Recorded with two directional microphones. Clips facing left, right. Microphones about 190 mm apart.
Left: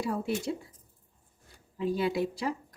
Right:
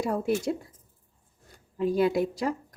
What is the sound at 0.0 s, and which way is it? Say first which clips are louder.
Speech: right 4 dB; 45° right (ahead or behind).